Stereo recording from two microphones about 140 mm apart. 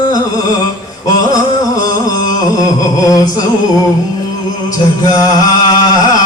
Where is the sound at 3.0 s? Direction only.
25° left (ahead or behind).